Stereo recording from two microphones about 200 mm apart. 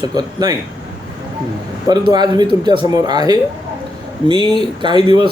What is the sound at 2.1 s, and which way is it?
Speech, 20° right (ahead or behind).